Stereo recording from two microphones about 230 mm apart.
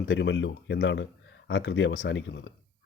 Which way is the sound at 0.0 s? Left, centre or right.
Left.